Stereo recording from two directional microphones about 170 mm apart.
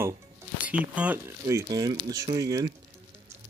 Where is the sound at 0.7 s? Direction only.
10° right (ahead or behind).